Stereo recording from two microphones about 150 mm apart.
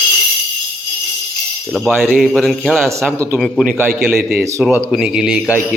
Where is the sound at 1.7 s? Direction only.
Centre (ahead or behind).